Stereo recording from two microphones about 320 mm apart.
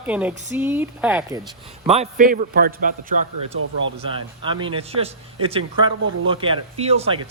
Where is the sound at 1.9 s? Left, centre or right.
Right.